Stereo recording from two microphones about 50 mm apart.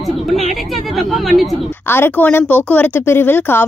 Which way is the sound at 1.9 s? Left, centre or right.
Left.